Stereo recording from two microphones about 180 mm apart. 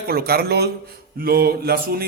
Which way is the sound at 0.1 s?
60° right (ahead or behind).